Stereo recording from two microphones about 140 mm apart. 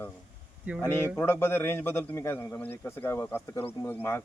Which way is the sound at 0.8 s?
15° left (ahead or behind).